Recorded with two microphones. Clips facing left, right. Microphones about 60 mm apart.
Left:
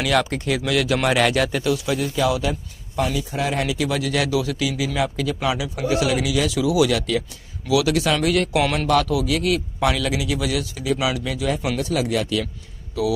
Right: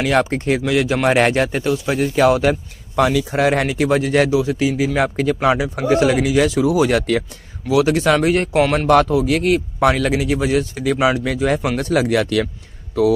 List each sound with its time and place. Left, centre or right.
0.0 s speech: right
3.0 s speech: right
7.7 s speech: right
13.0 s speech: right